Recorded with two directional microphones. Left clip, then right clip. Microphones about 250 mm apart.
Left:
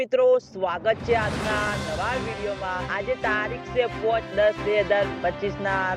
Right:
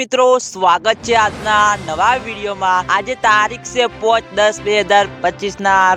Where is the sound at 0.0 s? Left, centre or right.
Right.